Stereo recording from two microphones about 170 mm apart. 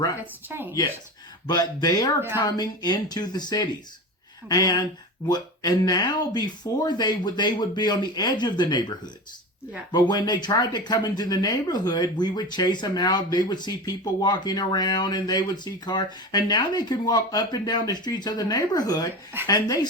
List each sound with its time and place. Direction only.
0.4 s speech: 10° right (ahead or behind)
1.5 s speech: 25° left (ahead or behind)
9.9 s speech: 25° left (ahead or behind)